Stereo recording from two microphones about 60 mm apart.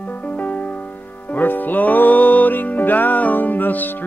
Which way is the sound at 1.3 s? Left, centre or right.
Left.